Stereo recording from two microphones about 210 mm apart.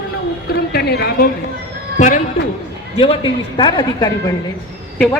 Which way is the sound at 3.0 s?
25° left (ahead or behind).